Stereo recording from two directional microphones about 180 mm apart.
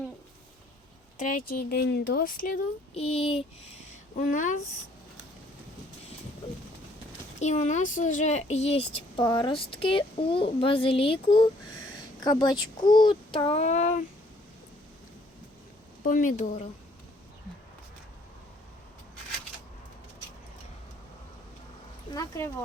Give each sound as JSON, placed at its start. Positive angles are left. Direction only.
{"t": 1.2, "sound": "speech", "side_deg": 50}
{"t": 2.9, "sound": "speech", "side_deg": 35}
{"t": 7.3, "sound": "a child's voice", "side_deg": 40}
{"t": 16.0, "sound": "speech", "side_deg": 45}
{"t": 22.1, "sound": "a child's voice", "side_deg": 20}